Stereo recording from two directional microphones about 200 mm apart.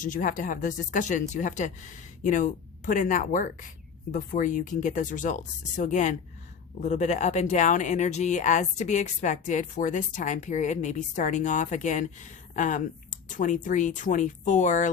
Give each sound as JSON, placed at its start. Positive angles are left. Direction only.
{"t": 0.0, "sound": "speech", "side_deg": 40}